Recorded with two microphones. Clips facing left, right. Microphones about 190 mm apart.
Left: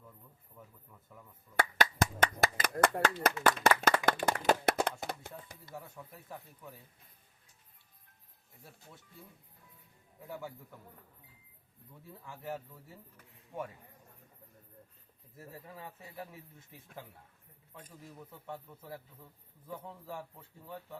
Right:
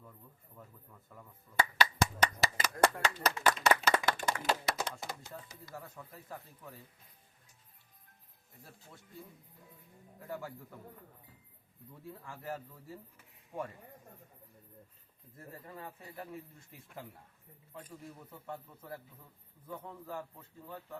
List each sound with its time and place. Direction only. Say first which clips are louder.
1.8 s a sound: left 1 dB; 50° left (ahead or behind)
3.4 s clapping: left 1 dB; 55° left (ahead or behind)
5.7 s speech: left 1 dB; centre (ahead or behind)
10.2 s speech: right 1 dB; centre (ahead or behind)
12.0 s speech: even; centre (ahead or behind)
15.4 s speech: even; 5° left (ahead or behind)
18.4 s a man's voice: right 1 dB; 5° left (ahead or behind)